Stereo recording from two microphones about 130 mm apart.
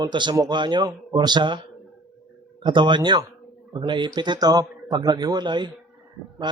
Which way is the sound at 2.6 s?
35° right (ahead or behind).